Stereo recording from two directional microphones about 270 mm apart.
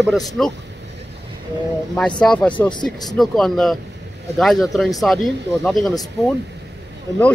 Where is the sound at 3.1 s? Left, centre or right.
Centre.